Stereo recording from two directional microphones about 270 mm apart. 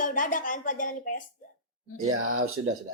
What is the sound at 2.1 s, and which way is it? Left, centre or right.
Speech, right.